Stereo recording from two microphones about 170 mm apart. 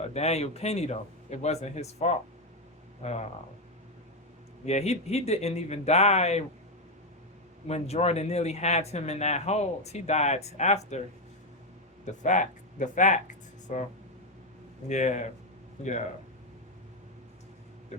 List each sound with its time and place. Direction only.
0.1 s speech: 40° left (ahead or behind)
4.6 s speech: 40° left (ahead or behind)
7.7 s speech: 40° left (ahead or behind)
12.2 s speech: 45° left (ahead or behind)
14.8 s speech: 45° left (ahead or behind)